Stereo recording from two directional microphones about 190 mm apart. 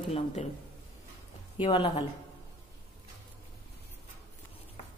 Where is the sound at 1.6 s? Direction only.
30° left (ahead or behind).